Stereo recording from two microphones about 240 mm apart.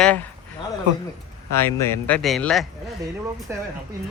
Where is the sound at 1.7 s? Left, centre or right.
Centre.